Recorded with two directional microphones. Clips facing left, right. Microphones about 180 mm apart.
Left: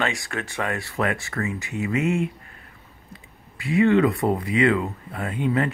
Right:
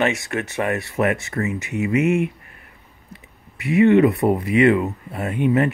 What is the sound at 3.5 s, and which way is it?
Speech, 20° right (ahead or behind).